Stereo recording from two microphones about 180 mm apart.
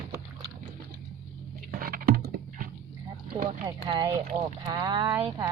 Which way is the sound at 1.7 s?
55° right (ahead or behind).